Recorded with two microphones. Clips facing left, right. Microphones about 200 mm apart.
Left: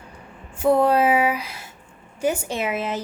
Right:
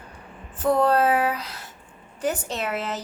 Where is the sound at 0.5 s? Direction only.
10° left (ahead or behind).